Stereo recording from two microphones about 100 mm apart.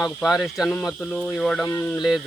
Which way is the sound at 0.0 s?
Centre (ahead or behind).